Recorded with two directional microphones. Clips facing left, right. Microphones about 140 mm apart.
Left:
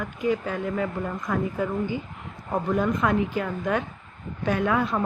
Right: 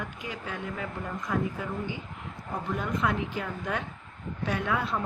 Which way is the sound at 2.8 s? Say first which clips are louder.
Left 5 dB; 50° left (ahead or behind).